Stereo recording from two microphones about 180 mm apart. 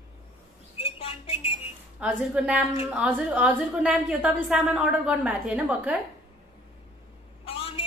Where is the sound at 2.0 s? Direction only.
5° right (ahead or behind).